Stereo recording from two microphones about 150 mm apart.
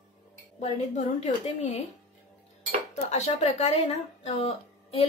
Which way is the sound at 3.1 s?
45° left (ahead or behind).